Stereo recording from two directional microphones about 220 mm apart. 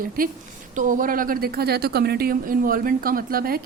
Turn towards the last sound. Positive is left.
turn(degrees=-40)  # may be behind; listen again after turning